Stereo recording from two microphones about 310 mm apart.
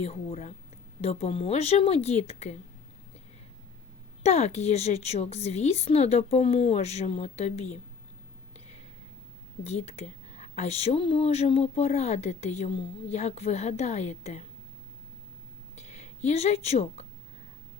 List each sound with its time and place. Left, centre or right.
0.0 s a woman's voice: centre
4.2 s a woman's voice: centre
9.6 s a woman's voice: centre
15.7 s a sound: left